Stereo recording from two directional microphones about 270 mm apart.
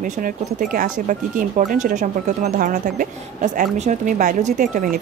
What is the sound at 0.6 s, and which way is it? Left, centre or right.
Speech, right.